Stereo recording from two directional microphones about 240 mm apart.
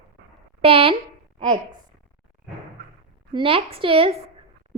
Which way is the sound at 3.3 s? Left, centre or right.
Right.